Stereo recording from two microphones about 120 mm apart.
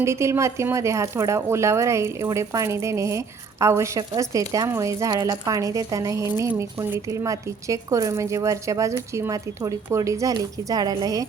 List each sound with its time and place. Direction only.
0.0 s speech: 25° right (ahead or behind)